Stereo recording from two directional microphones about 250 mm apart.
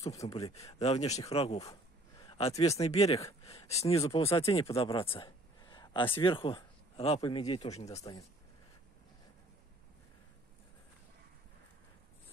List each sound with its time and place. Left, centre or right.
0.0 s speech: centre
0.7 s speech: left
1.3 s a sound: left
2.8 s speech: left
3.4 s a sound: left
4.0 s speech: left
7.9 s speech: centre